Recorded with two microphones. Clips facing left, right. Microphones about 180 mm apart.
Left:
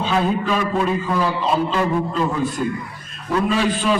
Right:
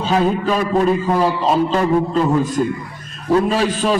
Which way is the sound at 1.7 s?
40° right (ahead or behind).